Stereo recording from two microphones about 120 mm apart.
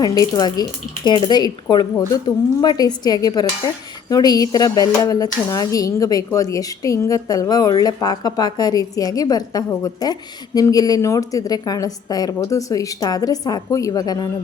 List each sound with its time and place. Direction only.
0.0 s speech: 30° left (ahead or behind)